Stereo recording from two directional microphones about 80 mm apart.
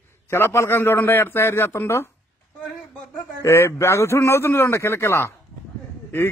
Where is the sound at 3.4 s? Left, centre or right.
Left.